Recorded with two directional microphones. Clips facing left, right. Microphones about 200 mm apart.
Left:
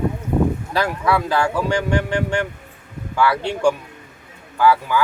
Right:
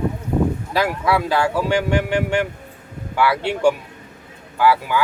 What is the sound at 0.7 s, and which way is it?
Speech, 10° right (ahead or behind).